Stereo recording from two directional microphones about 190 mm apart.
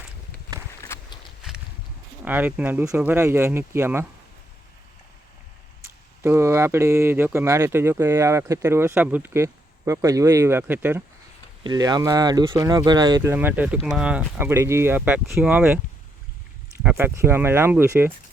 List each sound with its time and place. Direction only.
0.8 s walk: 15° left (ahead or behind)
2.2 s speech: 10° right (ahead or behind)
6.2 s speech: 15° right (ahead or behind)
11.6 s speech: 20° right (ahead or behind)
16.8 s speech: 10° right (ahead or behind)